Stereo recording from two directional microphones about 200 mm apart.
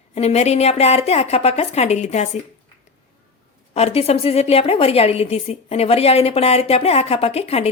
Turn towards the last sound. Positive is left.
turn(degrees=30)  # may be behind; listen again after turning